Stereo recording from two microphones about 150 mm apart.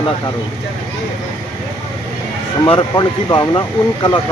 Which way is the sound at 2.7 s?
25° left (ahead or behind).